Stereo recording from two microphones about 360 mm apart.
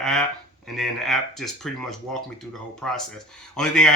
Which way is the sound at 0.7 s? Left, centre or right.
Centre.